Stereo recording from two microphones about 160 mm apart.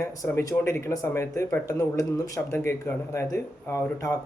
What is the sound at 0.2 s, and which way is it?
Speech, 20° left (ahead or behind).